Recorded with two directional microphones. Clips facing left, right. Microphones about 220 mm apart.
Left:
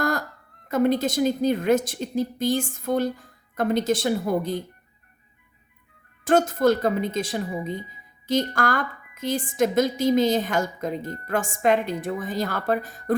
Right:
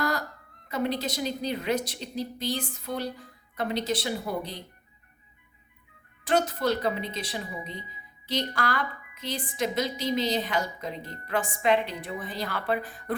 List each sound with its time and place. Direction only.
0.0 s a sound: 50° left (ahead or behind)
0.7 s a woman's voice: 50° left (ahead or behind)
6.2 s a woman's voice: 45° left (ahead or behind)